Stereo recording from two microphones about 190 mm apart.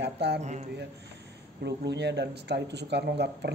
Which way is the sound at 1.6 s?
65° right (ahead or behind).